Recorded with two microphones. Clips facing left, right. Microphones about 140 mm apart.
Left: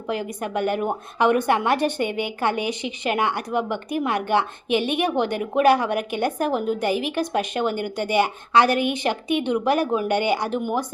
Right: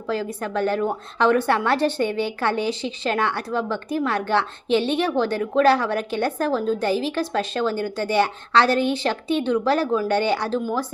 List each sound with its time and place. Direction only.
0.1 s a woman's voice: 15° left (ahead or behind)